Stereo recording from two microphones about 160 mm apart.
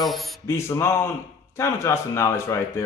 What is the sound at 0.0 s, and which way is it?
Speech, centre (ahead or behind).